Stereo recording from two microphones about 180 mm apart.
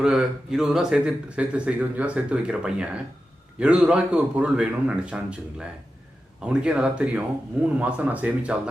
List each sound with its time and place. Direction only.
0.0 s speech: 5° right (ahead or behind)